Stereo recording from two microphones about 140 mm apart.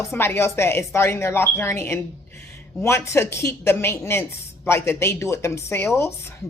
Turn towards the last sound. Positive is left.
turn(degrees=20)  # may be behind; listen again after turning